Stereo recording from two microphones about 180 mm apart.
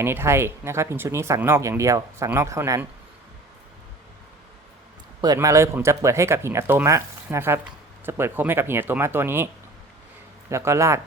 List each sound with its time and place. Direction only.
0.0 s speech: 15° right (ahead or behind)
5.2 s speech: 20° right (ahead or behind)
10.5 s speech: 15° right (ahead or behind)